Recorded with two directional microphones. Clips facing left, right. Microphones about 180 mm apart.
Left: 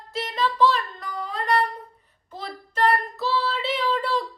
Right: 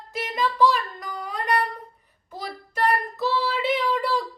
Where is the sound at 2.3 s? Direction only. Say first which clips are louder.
Even; 10° right (ahead or behind).